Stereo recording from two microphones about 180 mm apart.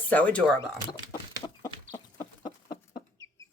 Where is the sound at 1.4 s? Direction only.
20° left (ahead or behind).